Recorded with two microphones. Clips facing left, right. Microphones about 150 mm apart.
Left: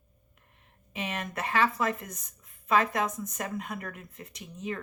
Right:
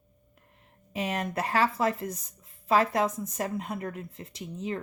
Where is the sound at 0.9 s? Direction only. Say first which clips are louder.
Right 4 dB; 35° right (ahead or behind).